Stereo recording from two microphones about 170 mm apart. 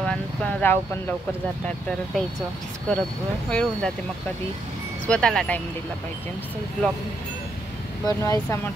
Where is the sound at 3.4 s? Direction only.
5° left (ahead or behind).